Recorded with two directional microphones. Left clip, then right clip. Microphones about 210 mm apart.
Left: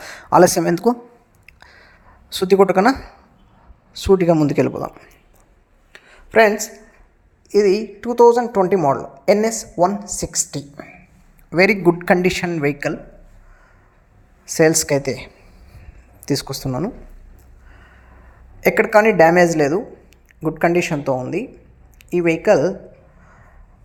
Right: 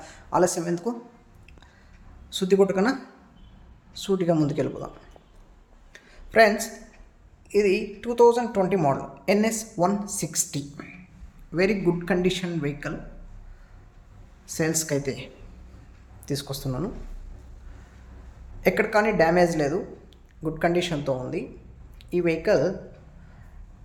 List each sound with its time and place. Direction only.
0.0 s speech: 45° left (ahead or behind)
1.5 s a sound: 40° left (ahead or behind)
2.3 s a man's voice: 40° left (ahead or behind)
5.9 s a sound: 25° left (ahead or behind)
7.5 s a woman's voice: 35° left (ahead or behind)
11.5 s a man's voice: 40° left (ahead or behind)
14.4 s a man's voice: 40° left (ahead or behind)
18.6 s a man's voice: 40° left (ahead or behind)